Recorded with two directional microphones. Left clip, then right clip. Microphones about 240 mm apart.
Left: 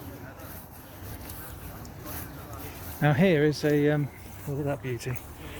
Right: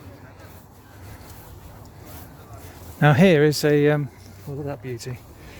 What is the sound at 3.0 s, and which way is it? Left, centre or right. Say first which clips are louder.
Speech: right 7 dB; right.